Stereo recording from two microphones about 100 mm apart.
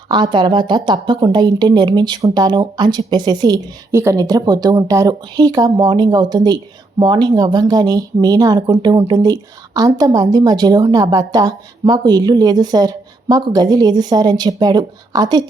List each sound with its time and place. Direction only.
0.1 s a woman's voice: 50° right (ahead or behind)
3.9 s speech: 30° right (ahead or behind)